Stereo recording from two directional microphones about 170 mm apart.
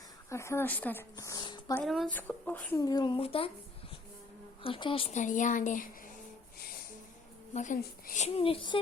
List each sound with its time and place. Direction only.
0.3 s speech: 15° left (ahead or behind)
1.1 s a sound: 20° left (ahead or behind)
1.8 s speech: centre (ahead or behind)
2.8 s speech: 25° left (ahead or behind)
4.6 s a woman's voice: 30° left (ahead or behind); by 5.9 s 50° left (ahead or behind)
7.5 s a woman's voice: 45° left (ahead or behind)
8.4 s a child's voice: 30° left (ahead or behind)